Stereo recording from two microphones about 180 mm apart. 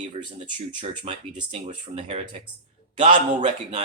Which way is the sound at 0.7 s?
25° right (ahead or behind).